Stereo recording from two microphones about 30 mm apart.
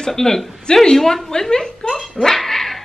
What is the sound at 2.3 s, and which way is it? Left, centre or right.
Dog, centre.